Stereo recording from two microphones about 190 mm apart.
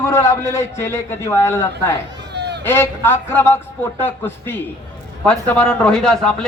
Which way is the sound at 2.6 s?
10° left (ahead or behind).